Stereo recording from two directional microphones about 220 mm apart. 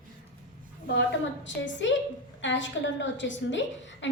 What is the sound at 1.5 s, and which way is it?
A woman's voice, 55° left (ahead or behind).